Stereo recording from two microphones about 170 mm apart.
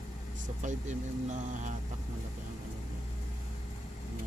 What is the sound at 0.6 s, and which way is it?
Speech, 45° right (ahead or behind).